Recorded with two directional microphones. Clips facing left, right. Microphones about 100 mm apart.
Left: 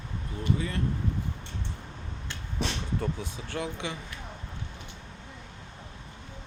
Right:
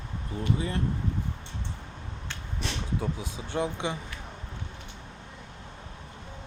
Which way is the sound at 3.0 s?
15° right (ahead or behind).